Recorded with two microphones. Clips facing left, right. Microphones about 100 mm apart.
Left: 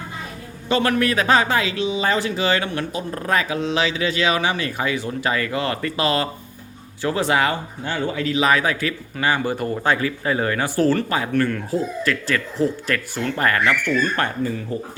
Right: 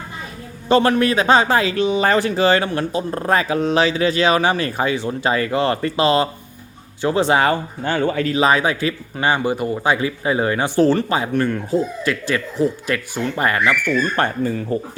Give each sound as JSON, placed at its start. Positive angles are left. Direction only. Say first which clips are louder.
{"t": 0.7, "sound": "speech", "louder": "right 4 dB", "side_deg": -30}
{"t": 1.8, "sound": "speech", "louder": "right 4 dB", "side_deg": -55}
{"t": 7.5, "sound": "speech", "louder": "right 5 dB", "side_deg": -55}
{"t": 8.4, "sound": "speech", "louder": "right 2 dB", "side_deg": -25}
{"t": 14.2, "sound": "speech", "louder": "right 4 dB", "side_deg": -30}
{"t": 14.7, "sound": "speech", "louder": "right 5 dB", "side_deg": -40}